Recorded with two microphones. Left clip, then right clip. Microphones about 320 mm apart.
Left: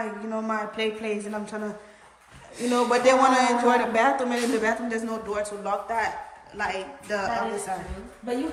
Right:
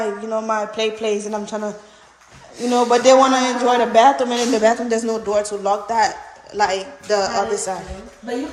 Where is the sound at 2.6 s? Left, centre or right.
Centre.